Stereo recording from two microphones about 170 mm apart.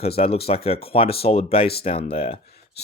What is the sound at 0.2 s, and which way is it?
Speech, 35° left (ahead or behind).